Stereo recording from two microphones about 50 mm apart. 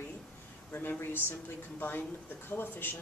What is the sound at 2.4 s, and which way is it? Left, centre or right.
Speech, left.